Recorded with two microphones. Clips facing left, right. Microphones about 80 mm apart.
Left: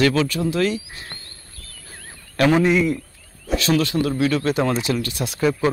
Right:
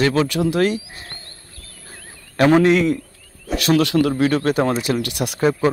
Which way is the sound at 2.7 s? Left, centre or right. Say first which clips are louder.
Right 2 dB; right.